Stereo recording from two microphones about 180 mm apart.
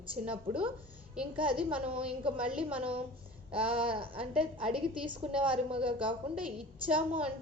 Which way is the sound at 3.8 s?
30° right (ahead or behind).